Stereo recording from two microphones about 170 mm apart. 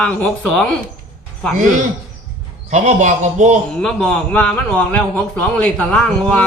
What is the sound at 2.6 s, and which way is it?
Speech, 45° right (ahead or behind).